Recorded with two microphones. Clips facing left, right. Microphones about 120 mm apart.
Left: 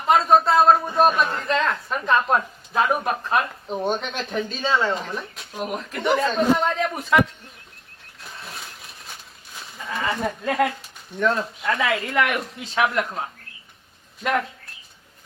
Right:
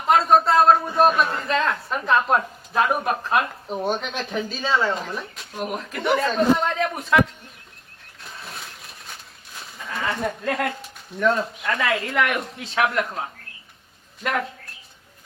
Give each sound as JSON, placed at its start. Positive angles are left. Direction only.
{"t": 0.0, "sound": "speech", "side_deg": 0}
{"t": 8.2, "sound": "sheep", "side_deg": 0}
{"t": 11.2, "sound": "speech", "side_deg": 0}